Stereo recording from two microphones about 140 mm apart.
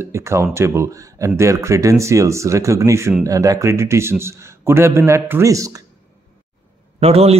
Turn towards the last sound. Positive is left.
turn(degrees=-45)  # may be behind; listen again after turning